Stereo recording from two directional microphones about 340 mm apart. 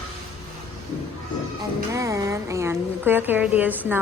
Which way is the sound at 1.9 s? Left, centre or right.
Centre.